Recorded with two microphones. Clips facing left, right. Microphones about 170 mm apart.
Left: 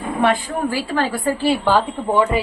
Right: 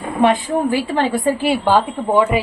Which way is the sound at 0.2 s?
20° right (ahead or behind).